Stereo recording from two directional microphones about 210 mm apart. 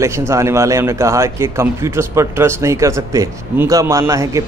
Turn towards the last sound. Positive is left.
turn(degrees=-15)  # may be behind; listen again after turning